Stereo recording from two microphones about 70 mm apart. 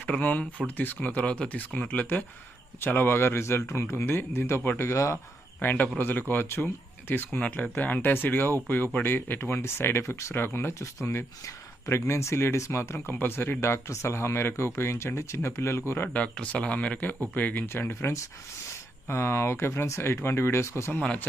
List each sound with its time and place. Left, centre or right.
0.0 s speech: left
5.6 s speech: left
7.3 s speech: centre; by 15.8 s left
16.1 s speech: centre
17.7 s speech: left